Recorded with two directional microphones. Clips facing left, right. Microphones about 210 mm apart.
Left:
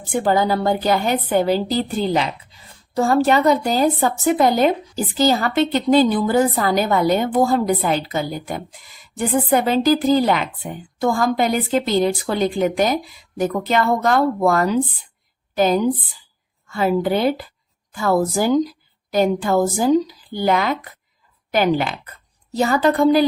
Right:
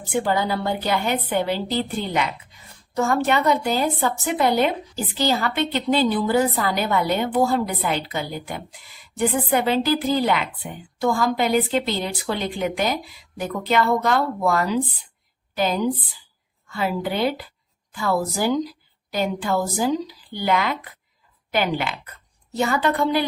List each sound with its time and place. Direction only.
0.1 s a woman's voice: 45° left (ahead or behind)